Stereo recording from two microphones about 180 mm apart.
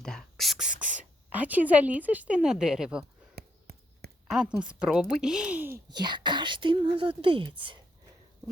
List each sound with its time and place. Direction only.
0.0 s whispering: centre (ahead or behind)
3.3 s a sound: 60° right (ahead or behind)
4.3 s speech: 5° right (ahead or behind)
5.9 s speech: 25° right (ahead or behind)